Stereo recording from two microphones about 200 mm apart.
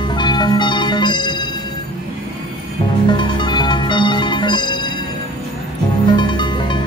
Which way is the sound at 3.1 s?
25° left (ahead or behind).